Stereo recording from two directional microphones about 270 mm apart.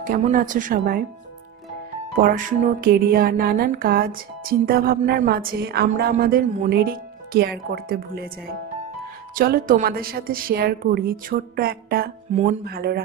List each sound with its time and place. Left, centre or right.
0.0 s speech: right
2.1 s music: right
9.3 s music: right